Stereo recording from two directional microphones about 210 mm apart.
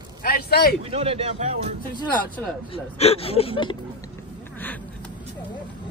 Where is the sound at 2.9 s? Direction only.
30° left (ahead or behind).